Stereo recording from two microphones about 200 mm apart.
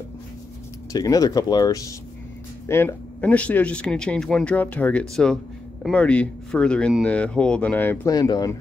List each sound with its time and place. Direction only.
0.9 s speech: 15° left (ahead or behind)